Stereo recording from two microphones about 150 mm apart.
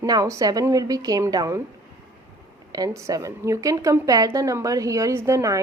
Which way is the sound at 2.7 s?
20° right (ahead or behind).